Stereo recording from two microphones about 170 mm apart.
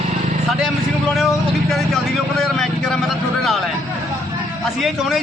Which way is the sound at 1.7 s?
Centre (ahead or behind).